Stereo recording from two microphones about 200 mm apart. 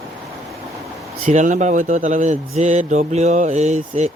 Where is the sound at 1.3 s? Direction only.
40° right (ahead or behind).